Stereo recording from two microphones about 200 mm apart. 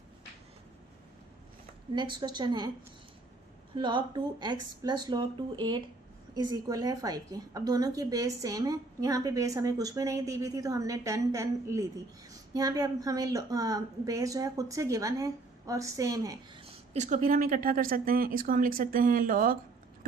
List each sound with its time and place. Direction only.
2.0 s speech: 20° right (ahead or behind)
3.8 s a woman's voice: 25° right (ahead or behind)
16.9 s speech: 35° right (ahead or behind)